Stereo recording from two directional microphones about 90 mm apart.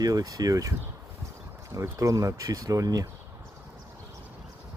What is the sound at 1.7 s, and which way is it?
Speech, 40° right (ahead or behind).